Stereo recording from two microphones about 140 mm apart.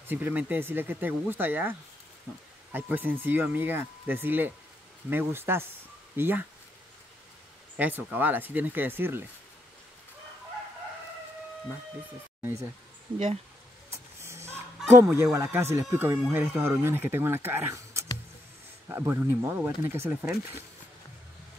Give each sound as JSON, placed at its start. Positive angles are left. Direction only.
{"t": 0.0, "sound": "speech", "side_deg": -15}
{"t": 7.7, "sound": "speech", "side_deg": -10}
{"t": 14.2, "sound": "fowl", "side_deg": -20}
{"t": 15.3, "sound": "speech", "side_deg": -15}